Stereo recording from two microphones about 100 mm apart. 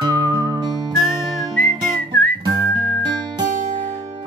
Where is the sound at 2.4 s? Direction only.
45° right (ahead or behind).